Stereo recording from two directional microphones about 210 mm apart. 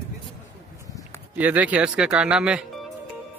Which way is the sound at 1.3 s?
10° right (ahead or behind).